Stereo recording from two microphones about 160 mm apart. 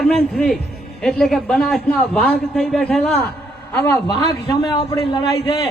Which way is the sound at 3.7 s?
15° left (ahead or behind).